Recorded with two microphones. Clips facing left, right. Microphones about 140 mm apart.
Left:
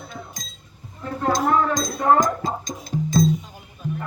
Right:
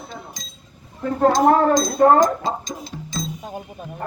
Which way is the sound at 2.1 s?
45° left (ahead or behind).